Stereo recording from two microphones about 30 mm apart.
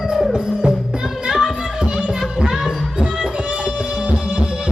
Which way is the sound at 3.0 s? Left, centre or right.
Right.